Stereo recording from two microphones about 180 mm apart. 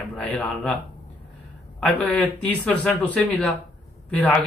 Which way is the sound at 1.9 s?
5° left (ahead or behind).